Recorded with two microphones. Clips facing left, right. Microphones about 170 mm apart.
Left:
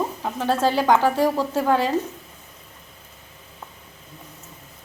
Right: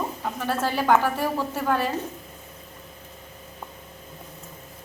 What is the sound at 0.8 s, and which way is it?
A woman's voice, 15° left (ahead or behind).